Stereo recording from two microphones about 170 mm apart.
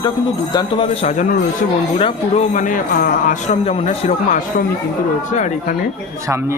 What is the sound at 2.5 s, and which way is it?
A man's voice, 50° left (ahead or behind).